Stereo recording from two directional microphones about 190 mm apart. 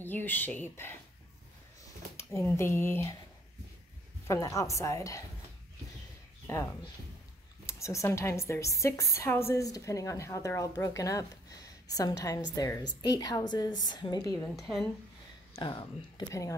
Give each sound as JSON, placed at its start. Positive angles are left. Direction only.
{"t": 0.0, "sound": "a woman's voice", "side_deg": 10}
{"t": 2.1, "sound": "a woman's voice", "side_deg": 15}
{"t": 4.3, "sound": "a woman's voice", "side_deg": 15}
{"t": 6.4, "sound": "a woman's voice", "side_deg": 15}
{"t": 14.4, "sound": "a woman's voice", "side_deg": 0}
{"t": 15.5, "sound": "a woman's voice", "side_deg": 25}